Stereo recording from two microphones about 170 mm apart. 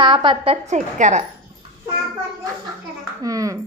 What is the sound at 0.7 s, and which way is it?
Speech, 45° right (ahead or behind).